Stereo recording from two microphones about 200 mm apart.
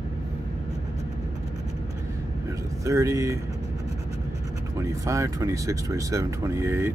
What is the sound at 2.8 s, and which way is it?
Speech, 15° right (ahead or behind).